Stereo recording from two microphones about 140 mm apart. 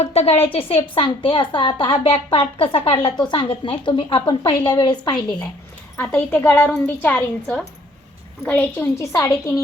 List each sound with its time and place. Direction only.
0.0 s a woman's voice: 45° left (ahead or behind); by 5.2 s 30° left (ahead or behind)
6.0 s a woman's voice: 10° left (ahead or behind)